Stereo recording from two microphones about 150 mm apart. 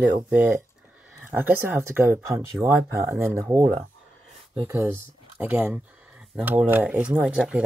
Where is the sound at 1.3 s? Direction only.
15° right (ahead or behind).